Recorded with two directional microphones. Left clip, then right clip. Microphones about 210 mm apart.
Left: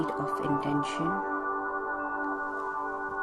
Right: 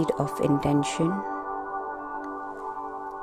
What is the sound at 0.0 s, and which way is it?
Speech, 50° right (ahead or behind).